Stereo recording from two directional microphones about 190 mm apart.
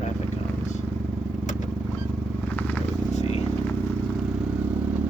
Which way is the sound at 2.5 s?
5° left (ahead or behind).